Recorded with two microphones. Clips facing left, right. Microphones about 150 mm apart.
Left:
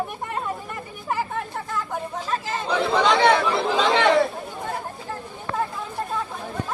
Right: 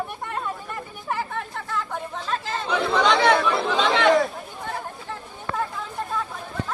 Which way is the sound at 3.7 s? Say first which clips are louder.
Even; 5° left (ahead or behind).